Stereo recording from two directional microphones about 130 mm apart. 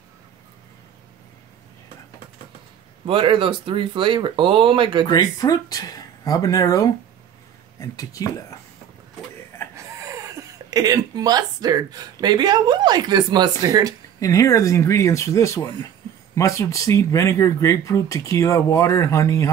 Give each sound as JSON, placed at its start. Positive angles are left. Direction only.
{"t": 3.1, "sound": "speech", "side_deg": -45}
{"t": 5.0, "sound": "speech", "side_deg": 30}
{"t": 9.8, "sound": "speech", "side_deg": -25}
{"t": 14.2, "sound": "speech", "side_deg": 25}